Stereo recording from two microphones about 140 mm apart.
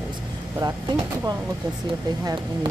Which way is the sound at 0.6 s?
25° right (ahead or behind).